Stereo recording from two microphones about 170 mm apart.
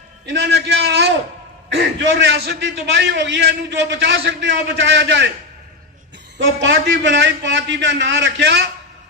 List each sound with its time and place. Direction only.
0.3 s a man's voice: 75° right (ahead or behind)
6.7 s a man's voice: 90° right